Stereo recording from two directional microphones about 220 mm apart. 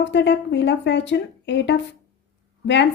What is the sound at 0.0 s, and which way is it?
A woman's voice, 55° left (ahead or behind).